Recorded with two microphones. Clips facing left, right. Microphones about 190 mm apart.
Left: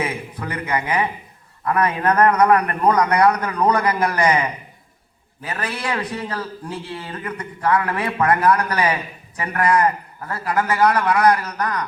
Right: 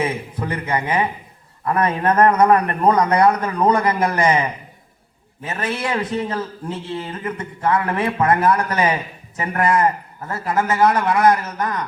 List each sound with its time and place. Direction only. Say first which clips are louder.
0.0 s a man's voice: right 3 dB; 25° right (ahead or behind)